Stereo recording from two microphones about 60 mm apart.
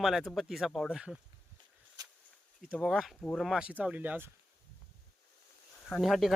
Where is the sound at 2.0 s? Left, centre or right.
Right.